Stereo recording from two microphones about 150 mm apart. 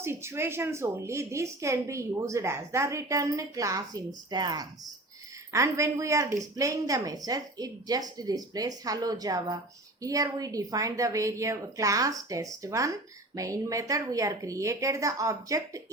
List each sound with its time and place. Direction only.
0.0 s a woman's voice: 15° right (ahead or behind)